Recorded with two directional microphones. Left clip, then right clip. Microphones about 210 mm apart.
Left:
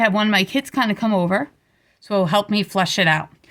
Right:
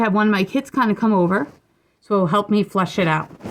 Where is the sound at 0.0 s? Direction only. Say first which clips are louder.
Left 1 dB; 50° left (ahead or behind).